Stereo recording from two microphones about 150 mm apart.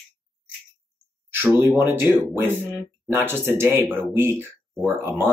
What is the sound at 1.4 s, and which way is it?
Speech, 15° right (ahead or behind).